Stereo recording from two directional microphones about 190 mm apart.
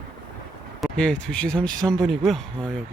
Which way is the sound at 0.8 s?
5° left (ahead or behind).